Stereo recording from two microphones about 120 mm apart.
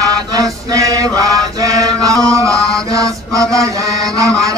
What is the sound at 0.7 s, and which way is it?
Chant, 30° right (ahead or behind).